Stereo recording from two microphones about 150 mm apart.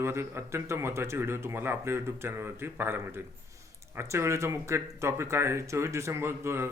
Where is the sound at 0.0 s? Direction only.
15° right (ahead or behind).